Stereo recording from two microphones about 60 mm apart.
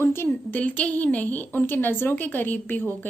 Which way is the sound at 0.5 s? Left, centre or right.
Left.